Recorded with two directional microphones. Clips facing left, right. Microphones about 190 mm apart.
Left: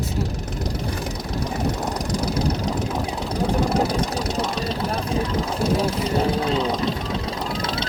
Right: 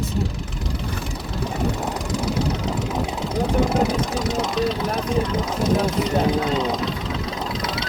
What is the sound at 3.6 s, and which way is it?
Vehicle, 35° left (ahead or behind).